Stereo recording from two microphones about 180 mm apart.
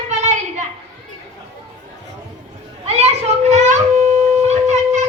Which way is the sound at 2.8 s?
35° right (ahead or behind).